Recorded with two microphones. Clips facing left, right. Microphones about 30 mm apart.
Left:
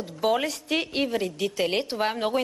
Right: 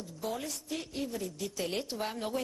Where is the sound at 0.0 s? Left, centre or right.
Left.